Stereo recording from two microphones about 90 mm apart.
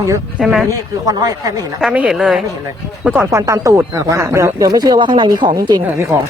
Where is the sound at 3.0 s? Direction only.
20° right (ahead or behind).